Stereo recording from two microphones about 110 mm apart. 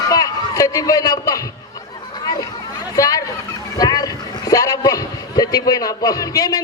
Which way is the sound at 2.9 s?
35° left (ahead or behind).